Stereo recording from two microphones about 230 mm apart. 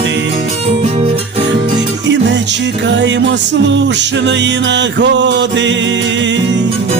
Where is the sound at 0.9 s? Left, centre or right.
Right.